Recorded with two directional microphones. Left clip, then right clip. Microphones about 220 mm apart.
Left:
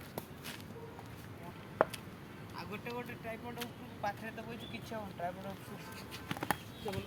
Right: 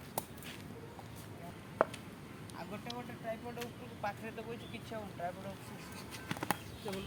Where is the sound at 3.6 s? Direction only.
20° left (ahead or behind).